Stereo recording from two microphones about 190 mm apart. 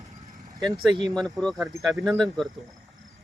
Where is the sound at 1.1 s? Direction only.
5° left (ahead or behind).